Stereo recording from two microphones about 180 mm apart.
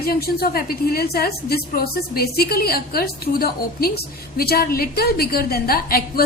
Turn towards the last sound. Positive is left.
turn(degrees=55)  # may be behind; listen again after turning